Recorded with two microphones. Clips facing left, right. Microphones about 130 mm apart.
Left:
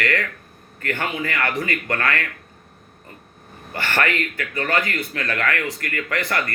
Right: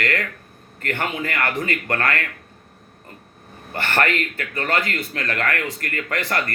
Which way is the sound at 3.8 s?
30° right (ahead or behind).